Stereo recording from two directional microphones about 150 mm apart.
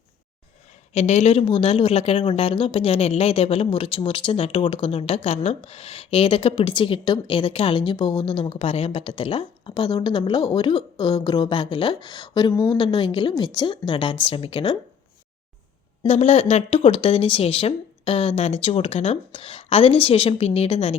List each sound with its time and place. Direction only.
0.9 s a woman's voice: 50° left (ahead or behind); by 12.8 s 20° left (ahead or behind)
12.8 s speech: 35° left (ahead or behind)
16.0 s speech: 45° left (ahead or behind)